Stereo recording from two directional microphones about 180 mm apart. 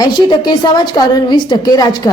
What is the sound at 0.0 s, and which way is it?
A woman's voice, 25° left (ahead or behind).